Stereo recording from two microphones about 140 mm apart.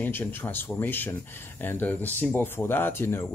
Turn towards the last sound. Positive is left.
turn(degrees=15)  # may be behind; listen again after turning